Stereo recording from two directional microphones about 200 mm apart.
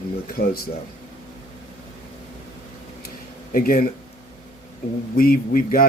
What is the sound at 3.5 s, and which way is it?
Speech, 45° left (ahead or behind).